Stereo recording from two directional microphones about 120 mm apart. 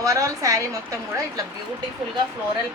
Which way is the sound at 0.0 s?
25° right (ahead or behind).